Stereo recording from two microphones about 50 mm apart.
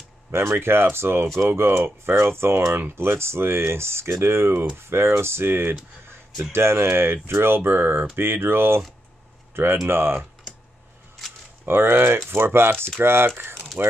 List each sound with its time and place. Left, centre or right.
0.3 s speech: right
9.8 s speech: right
11.6 s speech: right
13.8 s speech: right